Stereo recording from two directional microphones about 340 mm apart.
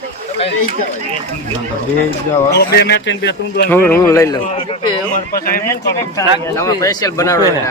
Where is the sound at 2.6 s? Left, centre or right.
Left.